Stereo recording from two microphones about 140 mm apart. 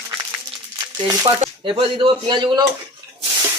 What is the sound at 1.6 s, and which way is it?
Speech, 40° right (ahead or behind).